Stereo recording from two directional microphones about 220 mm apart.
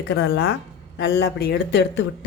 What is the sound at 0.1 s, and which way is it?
Speech, 55° left (ahead or behind).